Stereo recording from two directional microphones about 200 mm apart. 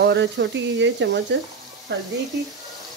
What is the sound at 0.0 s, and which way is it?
Speech, 60° right (ahead or behind).